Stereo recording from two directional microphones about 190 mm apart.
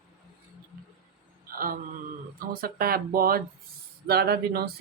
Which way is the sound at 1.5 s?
50° right (ahead or behind).